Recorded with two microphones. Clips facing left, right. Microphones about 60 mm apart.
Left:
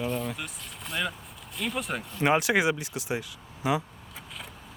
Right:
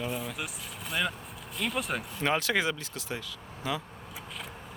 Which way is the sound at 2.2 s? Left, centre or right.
Centre.